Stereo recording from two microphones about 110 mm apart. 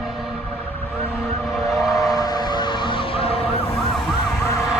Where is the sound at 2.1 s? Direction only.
35° left (ahead or behind); by 3.7 s 60° left (ahead or behind).